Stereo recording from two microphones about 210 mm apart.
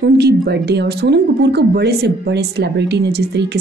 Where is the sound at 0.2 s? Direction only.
50° right (ahead or behind).